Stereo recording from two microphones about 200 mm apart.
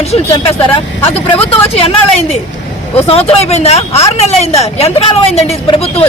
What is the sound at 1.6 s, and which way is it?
A woman's voice, 30° left (ahead or behind).